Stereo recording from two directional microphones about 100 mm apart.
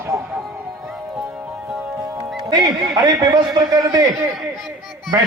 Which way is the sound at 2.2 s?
40° right (ahead or behind).